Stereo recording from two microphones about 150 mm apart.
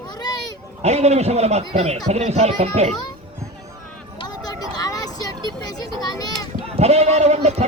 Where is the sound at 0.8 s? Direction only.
45° right (ahead or behind).